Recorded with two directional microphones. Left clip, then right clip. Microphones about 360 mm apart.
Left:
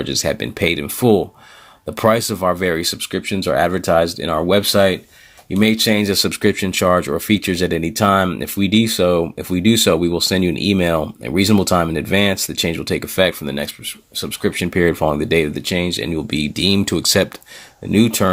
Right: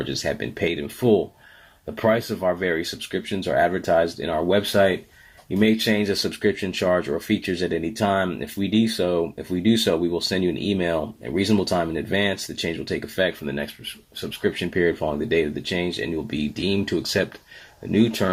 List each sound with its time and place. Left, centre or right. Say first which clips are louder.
0.0 s speech: left 6 dB; left